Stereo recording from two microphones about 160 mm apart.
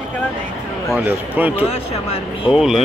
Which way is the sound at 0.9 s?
10° right (ahead or behind).